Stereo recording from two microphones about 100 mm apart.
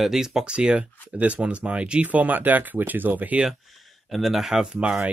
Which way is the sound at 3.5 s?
Centre (ahead or behind).